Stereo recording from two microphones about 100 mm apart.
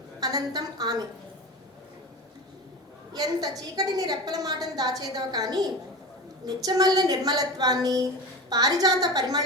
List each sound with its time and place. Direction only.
0.2 s a woman's voice: 40° right (ahead or behind)
3.1 s a woman's voice: 40° right (ahead or behind)